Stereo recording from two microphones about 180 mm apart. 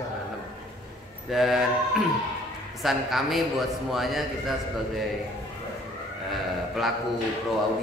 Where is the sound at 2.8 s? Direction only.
Centre (ahead or behind).